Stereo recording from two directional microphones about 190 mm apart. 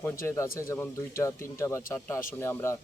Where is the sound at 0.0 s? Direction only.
15° left (ahead or behind).